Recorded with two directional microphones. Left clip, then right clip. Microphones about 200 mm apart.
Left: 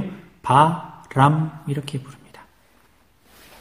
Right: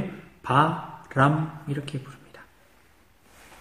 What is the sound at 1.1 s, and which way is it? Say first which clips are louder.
Speech: left 4 dB; 50° left (ahead or behind).